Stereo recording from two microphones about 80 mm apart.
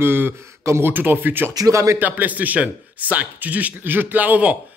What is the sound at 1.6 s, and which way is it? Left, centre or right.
Speech, right.